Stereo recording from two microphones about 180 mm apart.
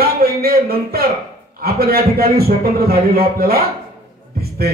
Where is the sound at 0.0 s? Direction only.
55° right (ahead or behind).